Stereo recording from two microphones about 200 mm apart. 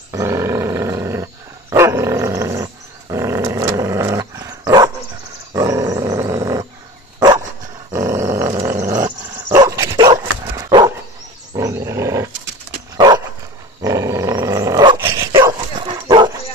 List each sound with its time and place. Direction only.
0.1 s roar: 15° right (ahead or behind)
1.7 s dog: 15° right (ahead or behind)
7.9 s growling: 20° right (ahead or behind)
9.6 s dog: 20° right (ahead or behind)
11.5 s roar: 15° right (ahead or behind)
12.9 s dog: 20° right (ahead or behind)